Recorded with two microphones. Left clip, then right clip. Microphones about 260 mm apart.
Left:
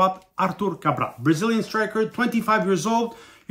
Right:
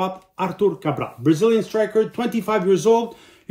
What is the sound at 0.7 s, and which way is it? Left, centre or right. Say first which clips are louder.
Speech: left 2 dB; centre.